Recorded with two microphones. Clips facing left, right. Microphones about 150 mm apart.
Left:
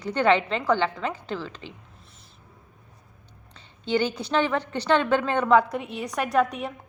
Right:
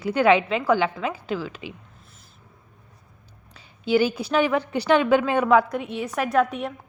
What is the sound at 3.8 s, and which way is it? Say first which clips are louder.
A woman's voice: right 4 dB; 5° right (ahead or behind).